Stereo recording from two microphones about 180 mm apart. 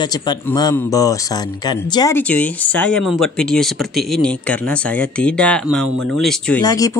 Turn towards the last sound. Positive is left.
turn(degrees=20)  # may be behind; listen again after turning